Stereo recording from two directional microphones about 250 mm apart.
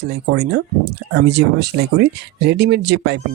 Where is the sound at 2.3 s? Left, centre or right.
Right.